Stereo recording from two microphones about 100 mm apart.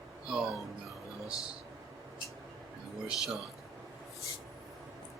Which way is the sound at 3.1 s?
Centre (ahead or behind).